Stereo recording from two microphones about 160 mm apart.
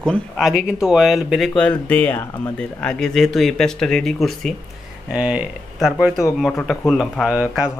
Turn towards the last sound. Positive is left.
turn(degrees=-5)  # may be behind; listen again after turning